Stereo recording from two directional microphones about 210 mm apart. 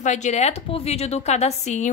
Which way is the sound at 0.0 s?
35° left (ahead or behind).